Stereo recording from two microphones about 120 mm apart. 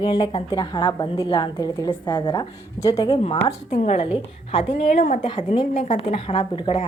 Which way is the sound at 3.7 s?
70° left (ahead or behind).